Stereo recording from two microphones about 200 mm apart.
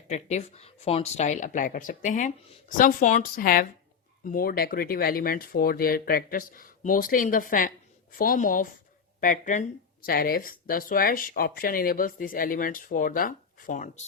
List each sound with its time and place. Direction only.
0.1 s speech: 35° left (ahead or behind)